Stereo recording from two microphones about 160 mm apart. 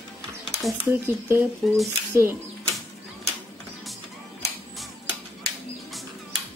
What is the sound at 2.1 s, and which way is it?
Speech, 15° right (ahead or behind).